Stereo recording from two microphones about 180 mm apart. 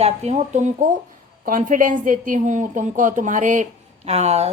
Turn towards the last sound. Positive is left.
turn(degrees=-35)  # may be behind; listen again after turning